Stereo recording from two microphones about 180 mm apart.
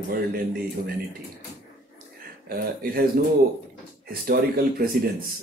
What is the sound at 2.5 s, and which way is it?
Speech, 55° right (ahead or behind).